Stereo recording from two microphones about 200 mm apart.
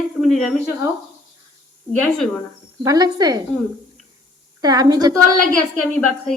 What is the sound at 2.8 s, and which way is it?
Speech, 20° right (ahead or behind).